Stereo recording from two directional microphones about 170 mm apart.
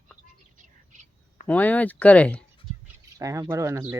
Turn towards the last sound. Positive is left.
turn(degrees=-15)  # may be behind; listen again after turning